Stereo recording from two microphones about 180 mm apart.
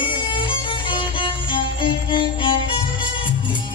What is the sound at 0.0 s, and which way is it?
Music, 25° left (ahead or behind).